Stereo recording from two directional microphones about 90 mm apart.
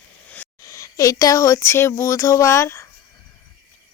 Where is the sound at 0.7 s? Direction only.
35° left (ahead or behind).